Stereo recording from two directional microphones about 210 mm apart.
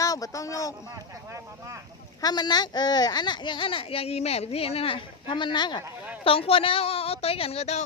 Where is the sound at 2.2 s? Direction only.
20° left (ahead or behind).